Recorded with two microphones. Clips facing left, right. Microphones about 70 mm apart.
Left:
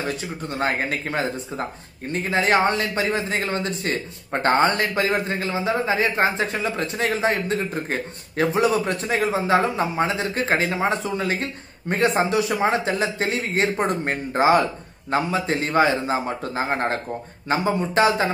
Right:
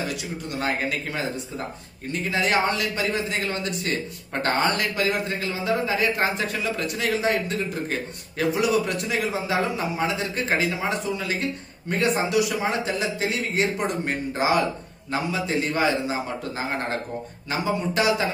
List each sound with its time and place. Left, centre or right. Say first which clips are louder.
0.1 s speech: left 2 dB; left